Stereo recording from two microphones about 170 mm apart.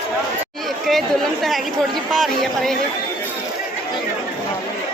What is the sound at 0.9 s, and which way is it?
Speech, centre (ahead or behind).